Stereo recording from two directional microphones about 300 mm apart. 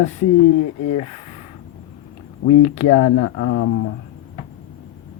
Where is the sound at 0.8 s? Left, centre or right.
Left.